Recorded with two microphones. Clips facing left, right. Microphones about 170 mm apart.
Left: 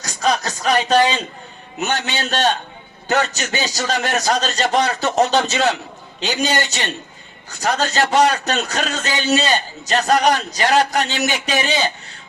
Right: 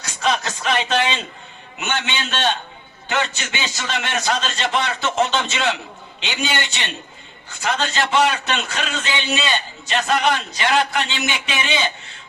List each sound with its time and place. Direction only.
0.0 s a man's voice: 40° left (ahead or behind)